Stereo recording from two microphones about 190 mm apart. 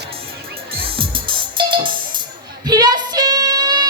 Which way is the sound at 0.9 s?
25° right (ahead or behind).